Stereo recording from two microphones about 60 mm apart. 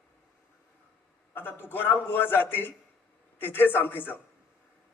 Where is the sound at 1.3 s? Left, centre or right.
Left.